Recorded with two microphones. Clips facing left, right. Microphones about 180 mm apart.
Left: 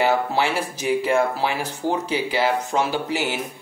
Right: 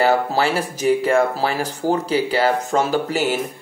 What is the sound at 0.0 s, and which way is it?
Speech, 40° right (ahead or behind).